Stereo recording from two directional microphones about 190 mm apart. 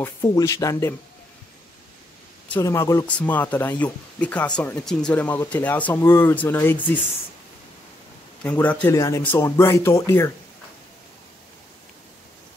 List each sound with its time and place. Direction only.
0.0 s speech: 15° left (ahead or behind)
2.5 s speech: 15° left (ahead or behind)
8.5 s speech: 10° left (ahead or behind)